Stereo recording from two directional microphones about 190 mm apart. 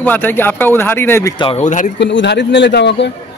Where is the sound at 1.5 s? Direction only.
40° left (ahead or behind).